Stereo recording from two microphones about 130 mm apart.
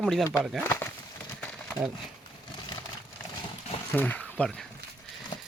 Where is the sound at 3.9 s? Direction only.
15° left (ahead or behind).